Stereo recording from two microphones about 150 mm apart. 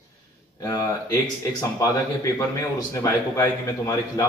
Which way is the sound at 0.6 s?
25° left (ahead or behind).